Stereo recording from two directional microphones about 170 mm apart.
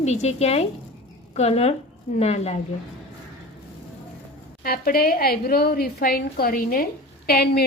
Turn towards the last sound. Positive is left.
turn(degrees=65)  # may be behind; listen again after turning